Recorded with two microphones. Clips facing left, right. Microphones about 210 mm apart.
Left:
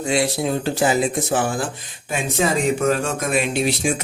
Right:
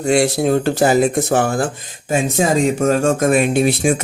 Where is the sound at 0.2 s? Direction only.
55° right (ahead or behind).